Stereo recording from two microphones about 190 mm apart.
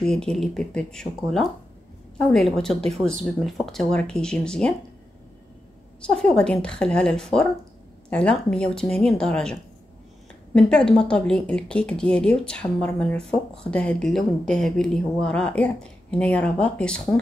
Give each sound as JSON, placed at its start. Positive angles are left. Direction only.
{"t": 0.0, "sound": "a woman's voice", "side_deg": 5}
{"t": 5.9, "sound": "a woman's voice", "side_deg": 5}